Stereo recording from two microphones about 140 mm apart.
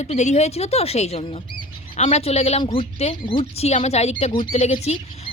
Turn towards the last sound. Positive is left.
turn(degrees=50)  # may be behind; listen again after turning